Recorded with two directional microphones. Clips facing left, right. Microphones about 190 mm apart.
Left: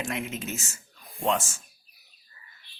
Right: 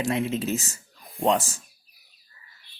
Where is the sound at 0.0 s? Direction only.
35° right (ahead or behind).